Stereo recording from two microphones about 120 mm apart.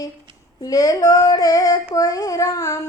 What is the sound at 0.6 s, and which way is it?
Child singing, 30° left (ahead or behind).